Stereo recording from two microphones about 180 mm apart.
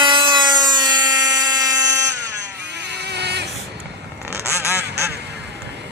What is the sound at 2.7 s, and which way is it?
Vehicle, 70° right (ahead or behind).